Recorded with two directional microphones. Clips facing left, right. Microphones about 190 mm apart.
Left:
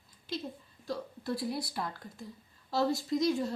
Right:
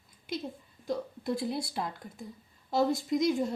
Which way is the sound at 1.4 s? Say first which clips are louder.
Right 2 dB; 25° right (ahead or behind).